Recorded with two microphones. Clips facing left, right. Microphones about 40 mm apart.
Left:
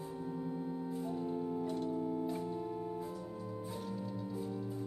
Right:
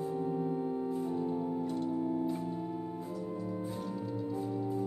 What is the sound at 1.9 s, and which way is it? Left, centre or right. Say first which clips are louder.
Organ: right 4 dB; centre.